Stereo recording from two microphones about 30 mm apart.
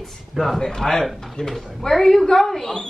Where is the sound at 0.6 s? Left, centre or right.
Centre.